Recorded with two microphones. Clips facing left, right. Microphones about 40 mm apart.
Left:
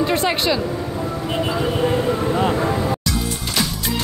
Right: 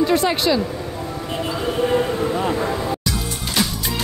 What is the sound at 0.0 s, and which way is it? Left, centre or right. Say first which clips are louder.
Speech: right 1 dB; left.